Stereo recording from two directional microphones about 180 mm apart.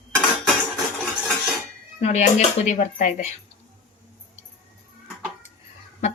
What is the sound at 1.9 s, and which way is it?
Speech, 40° left (ahead or behind).